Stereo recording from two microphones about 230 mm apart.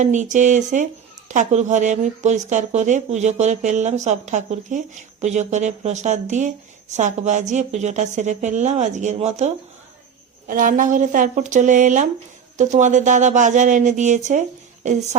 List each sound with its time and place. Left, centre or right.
0.0 s speech: right